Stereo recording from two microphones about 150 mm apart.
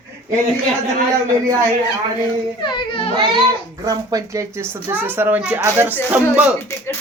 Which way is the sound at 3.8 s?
20° right (ahead or behind).